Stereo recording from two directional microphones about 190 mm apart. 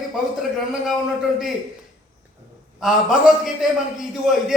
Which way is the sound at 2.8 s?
Centre (ahead or behind).